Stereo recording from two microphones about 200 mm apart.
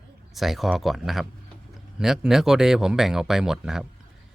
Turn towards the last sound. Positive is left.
turn(degrees=-5)  # may be behind; listen again after turning